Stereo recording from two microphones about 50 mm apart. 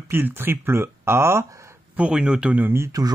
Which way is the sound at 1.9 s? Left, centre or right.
Right.